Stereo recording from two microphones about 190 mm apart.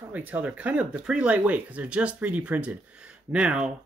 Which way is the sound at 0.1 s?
10° right (ahead or behind).